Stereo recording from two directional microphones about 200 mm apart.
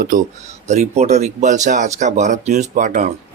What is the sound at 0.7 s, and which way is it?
Speech, 35° right (ahead or behind).